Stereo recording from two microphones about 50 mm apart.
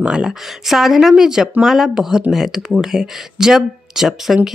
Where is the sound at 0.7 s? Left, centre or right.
Centre.